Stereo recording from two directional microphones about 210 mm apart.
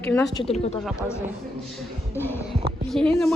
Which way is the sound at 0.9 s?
10° left (ahead or behind).